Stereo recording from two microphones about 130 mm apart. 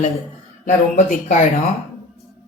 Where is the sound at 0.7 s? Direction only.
90° left.